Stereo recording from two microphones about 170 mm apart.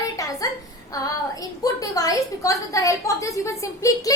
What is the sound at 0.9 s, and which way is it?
A woman's voice, 20° left (ahead or behind).